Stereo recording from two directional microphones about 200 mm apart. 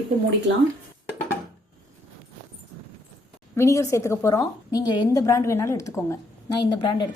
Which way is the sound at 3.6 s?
15° left (ahead or behind).